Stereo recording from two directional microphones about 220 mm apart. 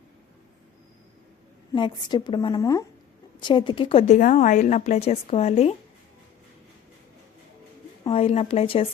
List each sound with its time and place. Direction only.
1.7 s a woman's voice: 20° left (ahead or behind)
8.0 s a woman's voice: 25° left (ahead or behind)